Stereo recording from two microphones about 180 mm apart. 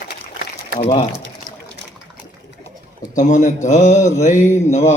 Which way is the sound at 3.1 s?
45° left (ahead or behind).